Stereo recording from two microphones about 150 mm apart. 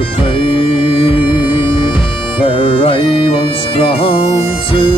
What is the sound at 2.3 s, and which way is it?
Bagpipes, 35° left (ahead or behind).